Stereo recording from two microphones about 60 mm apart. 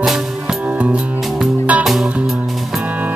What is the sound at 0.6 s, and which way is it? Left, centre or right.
Music, right.